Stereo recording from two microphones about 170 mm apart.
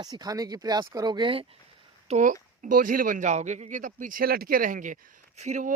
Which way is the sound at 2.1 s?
45° right (ahead or behind).